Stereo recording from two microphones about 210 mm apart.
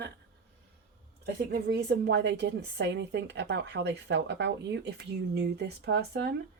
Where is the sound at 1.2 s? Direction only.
50° right (ahead or behind).